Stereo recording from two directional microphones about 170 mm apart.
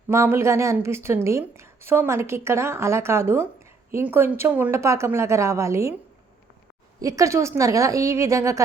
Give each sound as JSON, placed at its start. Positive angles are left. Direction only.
{"t": 0.1, "sound": "a woman's voice", "side_deg": -15}
{"t": 7.0, "sound": "a woman's voice", "side_deg": -20}